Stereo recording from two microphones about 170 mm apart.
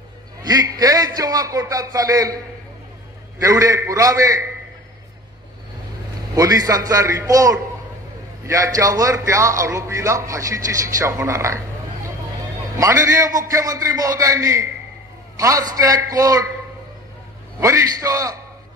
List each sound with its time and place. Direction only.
0.4 s a man's voice: 25° right (ahead or behind)
3.3 s a man's voice: 20° right (ahead or behind)
6.3 s a man's voice: 20° right (ahead or behind)
17.6 s a man's voice: 20° right (ahead or behind)